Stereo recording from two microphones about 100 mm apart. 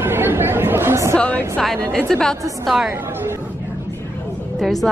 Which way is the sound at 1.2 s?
15° left (ahead or behind).